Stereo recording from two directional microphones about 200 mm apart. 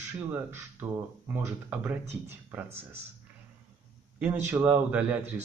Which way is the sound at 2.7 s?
30° right (ahead or behind).